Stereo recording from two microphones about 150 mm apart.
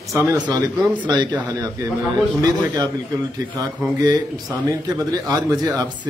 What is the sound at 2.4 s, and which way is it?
Speech, 25° right (ahead or behind).